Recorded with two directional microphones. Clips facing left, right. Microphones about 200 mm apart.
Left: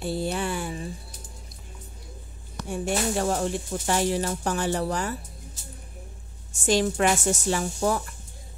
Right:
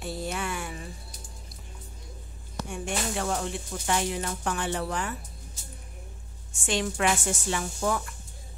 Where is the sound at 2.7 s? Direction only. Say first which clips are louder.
Left 6 dB; 40° left (ahead or behind).